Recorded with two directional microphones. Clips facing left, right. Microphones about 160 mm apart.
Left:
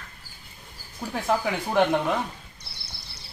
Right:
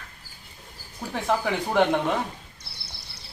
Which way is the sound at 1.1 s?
10° left (ahead or behind).